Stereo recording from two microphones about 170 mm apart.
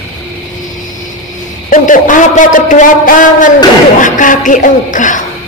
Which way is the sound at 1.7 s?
50° left (ahead or behind).